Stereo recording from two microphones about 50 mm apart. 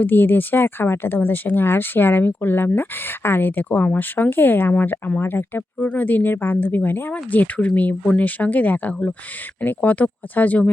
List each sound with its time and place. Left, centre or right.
0.0 s speech: left
5.8 s speech: left
7.1 s speech: left